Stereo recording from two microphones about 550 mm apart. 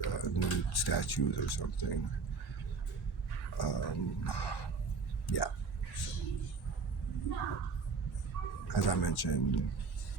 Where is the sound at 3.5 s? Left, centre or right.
Left.